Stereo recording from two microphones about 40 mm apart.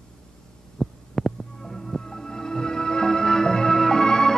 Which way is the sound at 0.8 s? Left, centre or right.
Centre.